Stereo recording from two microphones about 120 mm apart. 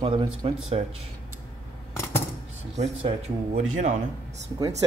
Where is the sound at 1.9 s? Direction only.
20° left (ahead or behind).